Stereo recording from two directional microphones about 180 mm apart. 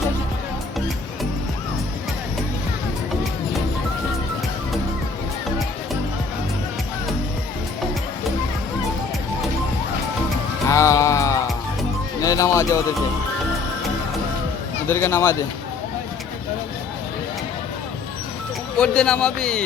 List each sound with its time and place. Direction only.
10.7 s music: 15° left (ahead or behind)
12.2 s speech: 20° left (ahead or behind)
14.8 s speech: 15° left (ahead or behind)
18.8 s a man's voice: 5° left (ahead or behind)